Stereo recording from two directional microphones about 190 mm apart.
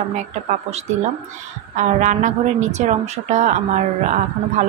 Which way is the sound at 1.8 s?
40° right (ahead or behind).